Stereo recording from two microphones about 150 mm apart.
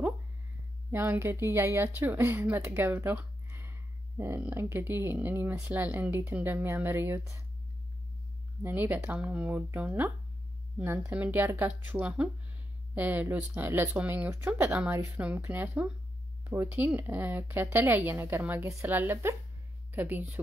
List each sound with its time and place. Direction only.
0.9 s speech: 15° right (ahead or behind)
8.6 s speech: 10° right (ahead or behind)